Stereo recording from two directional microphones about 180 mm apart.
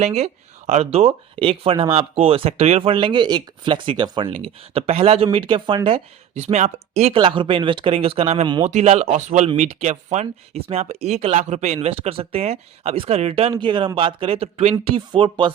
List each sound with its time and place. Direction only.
0.0 s speech: 35° right (ahead or behind)